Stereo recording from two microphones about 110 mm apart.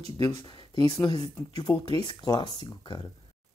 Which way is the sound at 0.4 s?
45° left (ahead or behind).